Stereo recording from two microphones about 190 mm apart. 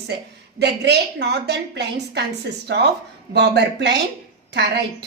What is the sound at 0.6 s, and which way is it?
A woman's voice, 60° right (ahead or behind).